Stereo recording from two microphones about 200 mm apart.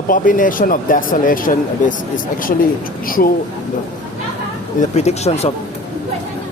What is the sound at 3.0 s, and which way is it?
Speech, 45° left (ahead or behind).